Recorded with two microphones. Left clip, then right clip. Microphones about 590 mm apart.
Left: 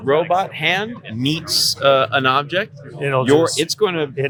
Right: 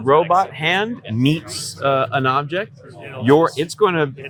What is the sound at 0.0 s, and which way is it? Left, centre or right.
Speech, right.